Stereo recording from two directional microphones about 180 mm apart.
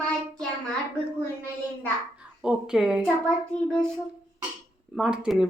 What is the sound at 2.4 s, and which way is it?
Speech, 5° right (ahead or behind).